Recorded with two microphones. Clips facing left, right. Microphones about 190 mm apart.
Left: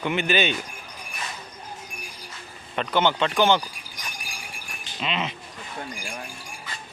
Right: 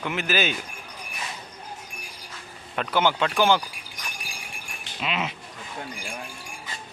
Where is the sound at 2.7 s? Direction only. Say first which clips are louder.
Left 1 dB; 5° right (ahead or behind).